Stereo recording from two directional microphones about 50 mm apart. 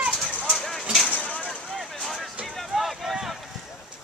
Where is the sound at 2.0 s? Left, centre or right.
Centre.